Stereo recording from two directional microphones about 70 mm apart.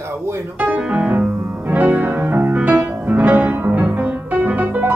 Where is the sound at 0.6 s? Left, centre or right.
Centre.